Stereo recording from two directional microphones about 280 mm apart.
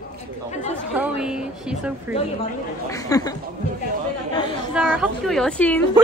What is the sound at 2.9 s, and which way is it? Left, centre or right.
Speech, centre.